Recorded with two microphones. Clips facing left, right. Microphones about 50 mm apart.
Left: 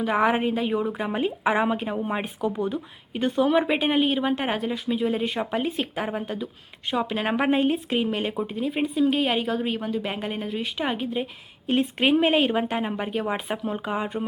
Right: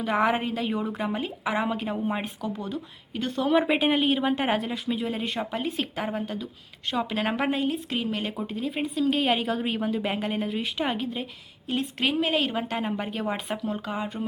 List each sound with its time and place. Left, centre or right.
0.0 s speech: centre
1.1 s speech: centre
3.4 s speech: centre
11.8 s a woman's voice: left